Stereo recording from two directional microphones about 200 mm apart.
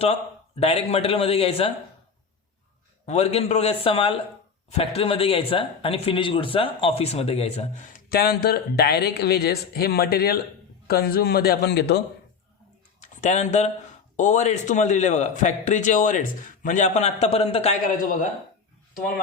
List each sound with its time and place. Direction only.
0.0 s a man's voice: 30° left (ahead or behind)
3.1 s a man's voice: 30° left (ahead or behind); by 12.0 s 55° left (ahead or behind)
13.0 s a sound: 35° left (ahead or behind)
14.2 s speech: 35° left (ahead or behind)